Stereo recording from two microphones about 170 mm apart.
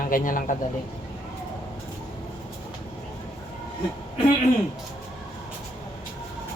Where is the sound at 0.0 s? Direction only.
55° left (ahead or behind).